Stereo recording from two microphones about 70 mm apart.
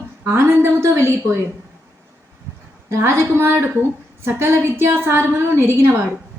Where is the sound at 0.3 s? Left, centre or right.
Right.